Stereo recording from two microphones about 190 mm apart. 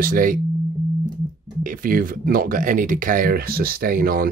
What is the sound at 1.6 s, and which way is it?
Speech, 45° right (ahead or behind).